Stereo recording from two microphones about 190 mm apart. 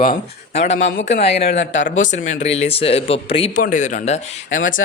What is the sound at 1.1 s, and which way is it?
Speech, 60° left (ahead or behind).